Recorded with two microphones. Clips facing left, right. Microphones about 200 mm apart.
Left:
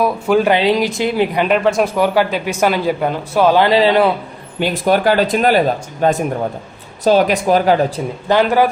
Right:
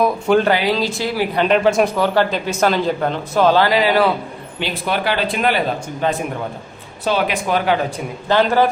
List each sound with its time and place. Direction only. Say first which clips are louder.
0.0 s speech: left 1 dB; 5° left (ahead or behind)
0.5 s speech: left 4 dB; 20° left (ahead or behind)
1.4 s speech: right 3 dB; 5° left (ahead or behind)
2.0 s speech: left 2 dB; 10° left (ahead or behind)
3.7 s speech: left 3 dB; 25° left (ahead or behind)
4.6 s speech: left 7 dB; 45° left (ahead or behind)
8.3 s speech: left 2 dB; 15° left (ahead or behind)